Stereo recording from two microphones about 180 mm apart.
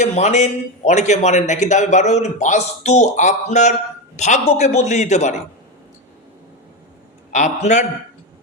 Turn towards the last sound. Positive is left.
turn(degrees=40)  # may be behind; listen again after turning